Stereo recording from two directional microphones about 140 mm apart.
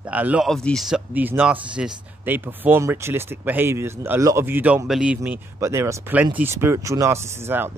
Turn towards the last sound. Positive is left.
turn(degrees=-15)  # may be behind; listen again after turning